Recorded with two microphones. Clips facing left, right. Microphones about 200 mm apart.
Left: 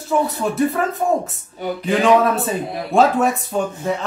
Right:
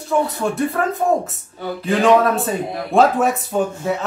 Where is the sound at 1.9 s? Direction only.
Centre (ahead or behind).